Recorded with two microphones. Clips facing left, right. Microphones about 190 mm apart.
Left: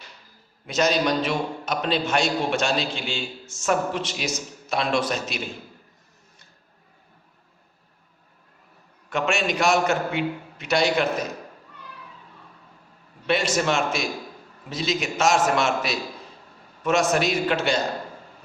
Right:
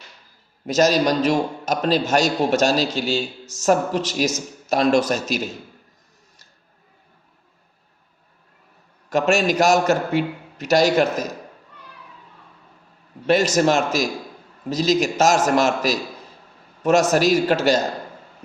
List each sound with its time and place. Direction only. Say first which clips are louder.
0.7 s a man's voice: right 4 dB; 40° right (ahead or behind)
9.0 s a man's voice: right 6 dB; 40° right (ahead or behind)
13.2 s a man's voice: right 6 dB; 40° right (ahead or behind)